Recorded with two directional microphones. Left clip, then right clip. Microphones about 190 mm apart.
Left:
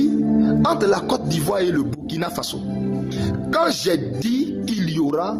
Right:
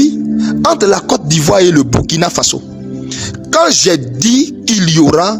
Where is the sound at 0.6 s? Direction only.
50° right (ahead or behind).